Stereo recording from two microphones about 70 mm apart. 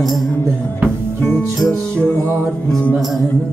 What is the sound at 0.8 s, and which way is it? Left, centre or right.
Music, centre.